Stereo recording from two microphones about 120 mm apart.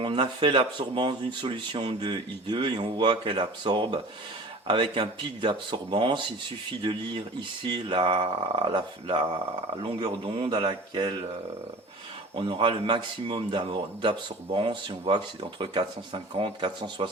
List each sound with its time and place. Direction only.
0.0 s speech: 40° right (ahead or behind)
12.4 s speech: 45° right (ahead or behind)